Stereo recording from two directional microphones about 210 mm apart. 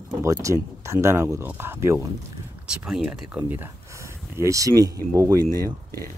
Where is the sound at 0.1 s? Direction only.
15° right (ahead or behind).